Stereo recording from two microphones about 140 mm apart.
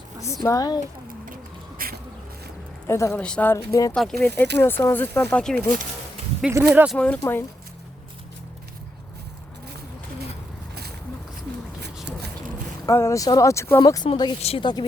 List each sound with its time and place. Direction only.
0.4 s speech: 25° left (ahead or behind)
1.8 s a sound: 90° right
2.8 s speech: 20° left (ahead or behind)
3.2 s speech: 10° left (ahead or behind)
3.5 s speech: 20° left (ahead or behind)
3.9 s speech: centre (ahead or behind)
4.3 s speech: 15° left (ahead or behind)
6.5 s speech: 20° right (ahead or behind)
6.9 s speech: 10° left (ahead or behind)
12.8 s speech: 20° left (ahead or behind)